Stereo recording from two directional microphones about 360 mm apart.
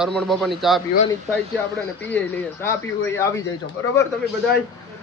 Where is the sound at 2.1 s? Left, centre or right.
Centre.